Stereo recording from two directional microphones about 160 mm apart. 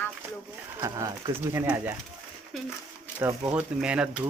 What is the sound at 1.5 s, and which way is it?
Speech, 10° right (ahead or behind).